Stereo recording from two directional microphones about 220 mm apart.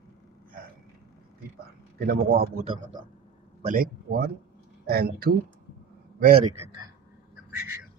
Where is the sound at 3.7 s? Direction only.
40° right (ahead or behind).